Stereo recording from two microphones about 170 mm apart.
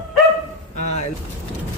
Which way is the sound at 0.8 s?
40° left (ahead or behind).